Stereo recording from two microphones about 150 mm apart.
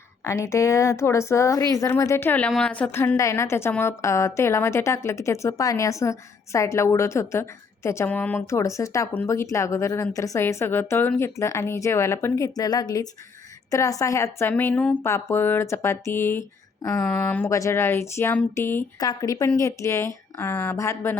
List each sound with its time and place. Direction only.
0.3 s a woman's voice: 20° left (ahead or behind)
18.9 s a woman's voice: 25° left (ahead or behind)